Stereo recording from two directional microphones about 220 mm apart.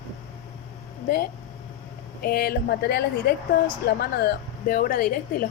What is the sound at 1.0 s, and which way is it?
A woman's voice, 45° left (ahead or behind).